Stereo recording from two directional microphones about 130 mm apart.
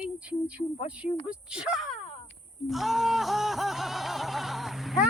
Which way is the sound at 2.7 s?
Centre (ahead or behind).